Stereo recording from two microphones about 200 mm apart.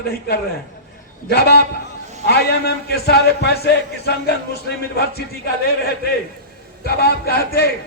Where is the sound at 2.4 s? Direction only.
55° left (ahead or behind).